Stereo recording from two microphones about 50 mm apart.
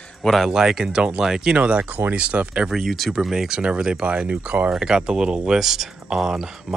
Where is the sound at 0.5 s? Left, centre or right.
Centre.